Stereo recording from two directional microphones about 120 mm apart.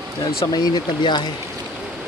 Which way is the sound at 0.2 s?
35° left (ahead or behind).